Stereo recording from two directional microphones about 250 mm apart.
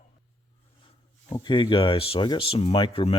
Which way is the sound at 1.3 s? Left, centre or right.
Centre.